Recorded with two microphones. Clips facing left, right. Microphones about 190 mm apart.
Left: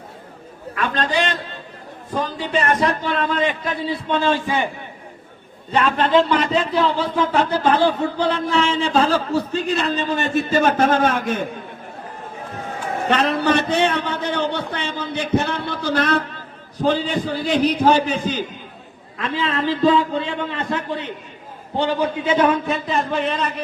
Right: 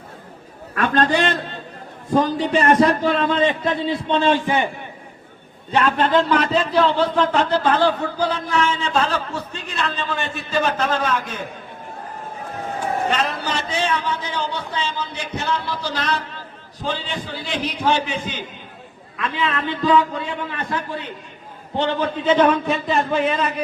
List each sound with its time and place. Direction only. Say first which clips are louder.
0.8 s a man's voice: right 3 dB; 50° right (ahead or behind)
2.6 s a man's voice: right 6 dB; 35° right (ahead or behind)
5.7 s speech: left 1 dB; 5° left (ahead or behind)
8.5 s a man's voice: left 2 dB; 30° left (ahead or behind); by 11.4 s 50° left (ahead or behind)
13.1 s a man's voice: left 5 dB; 60° left (ahead or behind); by 21.1 s 20° left (ahead or behind)
21.8 s a man's voice: left 1 dB; 10° left (ahead or behind); by 23.6 s 5° right (ahead or behind)